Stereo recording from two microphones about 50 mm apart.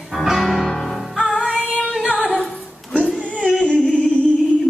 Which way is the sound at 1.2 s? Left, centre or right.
Centre.